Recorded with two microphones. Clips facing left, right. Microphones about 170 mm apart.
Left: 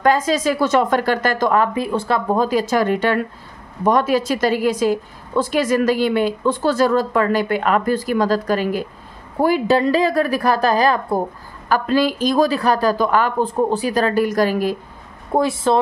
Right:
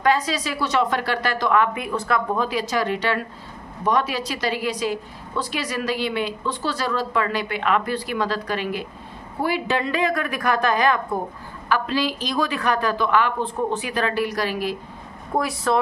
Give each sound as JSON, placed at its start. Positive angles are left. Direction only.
{"t": 0.0, "sound": "a woman's voice", "side_deg": 45}
{"t": 11.7, "sound": "a woman's voice", "side_deg": 45}
{"t": 15.3, "sound": "a woman's voice", "side_deg": 25}